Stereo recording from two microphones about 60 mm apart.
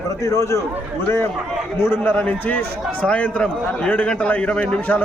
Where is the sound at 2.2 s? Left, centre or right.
Left.